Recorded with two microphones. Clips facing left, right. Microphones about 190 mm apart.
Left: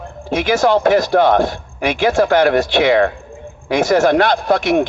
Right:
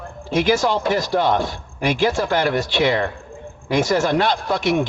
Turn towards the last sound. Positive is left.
turn(degrees=60)  # may be behind; listen again after turning